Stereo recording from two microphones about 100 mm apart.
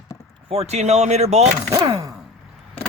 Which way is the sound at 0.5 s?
90° right.